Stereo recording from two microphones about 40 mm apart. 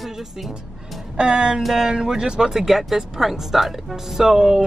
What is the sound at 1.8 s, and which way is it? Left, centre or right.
Speech, centre.